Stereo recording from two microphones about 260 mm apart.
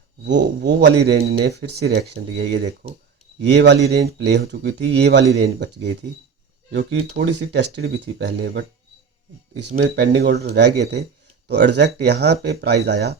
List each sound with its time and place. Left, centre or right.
0.3 s speech: right